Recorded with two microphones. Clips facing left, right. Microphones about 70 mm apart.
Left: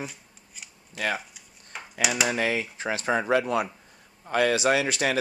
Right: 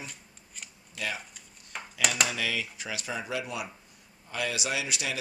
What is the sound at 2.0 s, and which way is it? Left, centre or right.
Speech, centre.